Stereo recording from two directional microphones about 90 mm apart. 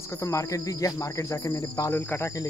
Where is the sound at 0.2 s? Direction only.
35° left (ahead or behind).